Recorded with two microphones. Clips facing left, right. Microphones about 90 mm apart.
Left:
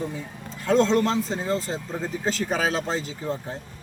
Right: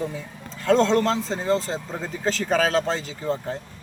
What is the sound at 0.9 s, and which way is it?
Speech, 5° left (ahead or behind).